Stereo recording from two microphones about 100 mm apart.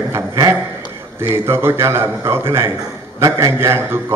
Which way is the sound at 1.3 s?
25° right (ahead or behind).